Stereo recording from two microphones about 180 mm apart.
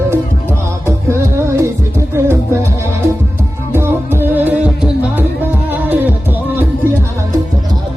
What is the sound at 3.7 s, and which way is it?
Music, 15° right (ahead or behind).